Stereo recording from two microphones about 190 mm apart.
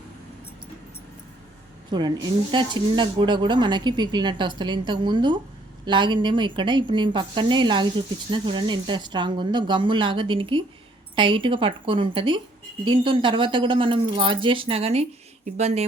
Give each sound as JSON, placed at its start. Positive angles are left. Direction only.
{"t": 1.9, "sound": "a woman's voice", "side_deg": -20}